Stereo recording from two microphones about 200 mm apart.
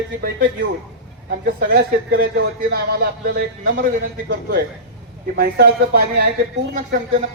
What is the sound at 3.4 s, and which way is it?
Speech, 50° right (ahead or behind).